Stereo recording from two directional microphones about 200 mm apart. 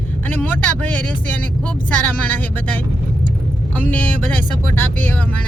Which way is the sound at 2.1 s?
10° left (ahead or behind).